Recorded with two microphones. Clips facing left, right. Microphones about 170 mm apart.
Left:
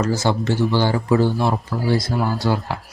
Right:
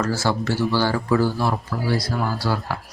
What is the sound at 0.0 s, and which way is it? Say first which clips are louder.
Speech: left 2 dB; 20° left (ahead or behind).